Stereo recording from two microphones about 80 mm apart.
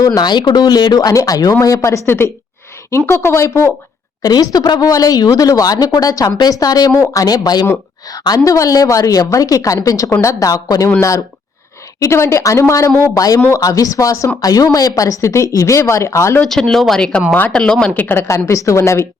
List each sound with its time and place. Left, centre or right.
0.0 s a woman's voice: left
4.2 s a woman's voice: left
11.9 s a woman's voice: left
16.5 s speech: centre
17.9 s a woman's voice: left